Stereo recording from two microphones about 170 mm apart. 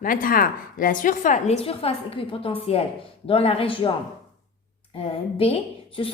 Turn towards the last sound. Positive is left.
turn(degrees=30)  # may be behind; listen again after turning